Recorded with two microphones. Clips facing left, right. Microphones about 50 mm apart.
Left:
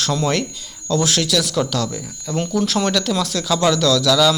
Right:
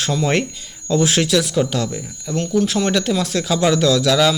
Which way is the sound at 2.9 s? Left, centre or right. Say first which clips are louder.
Right 1 dB; right.